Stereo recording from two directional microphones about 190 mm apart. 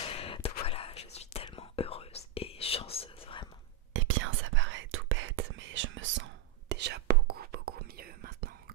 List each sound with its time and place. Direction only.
0.1 s whispering: 30° left (ahead or behind)
3.9 s whispering: 90° right; by 8.5 s 50° right (ahead or behind)